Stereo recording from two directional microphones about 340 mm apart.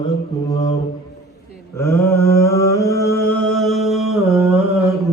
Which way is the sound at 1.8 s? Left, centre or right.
Centre.